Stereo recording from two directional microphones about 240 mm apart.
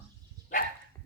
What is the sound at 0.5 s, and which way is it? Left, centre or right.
Dog, left.